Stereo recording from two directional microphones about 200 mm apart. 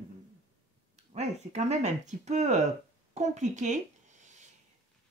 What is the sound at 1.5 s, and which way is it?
Speech, 35° right (ahead or behind).